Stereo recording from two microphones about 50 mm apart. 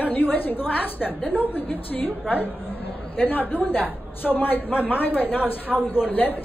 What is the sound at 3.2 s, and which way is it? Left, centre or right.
A woman's voice, left.